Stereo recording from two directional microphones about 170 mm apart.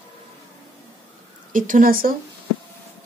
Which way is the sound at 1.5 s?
50° right (ahead or behind).